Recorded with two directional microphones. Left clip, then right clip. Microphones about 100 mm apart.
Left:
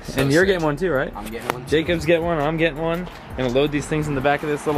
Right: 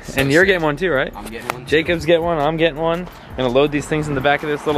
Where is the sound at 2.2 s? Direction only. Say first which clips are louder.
Right 4 dB; 5° right (ahead or behind).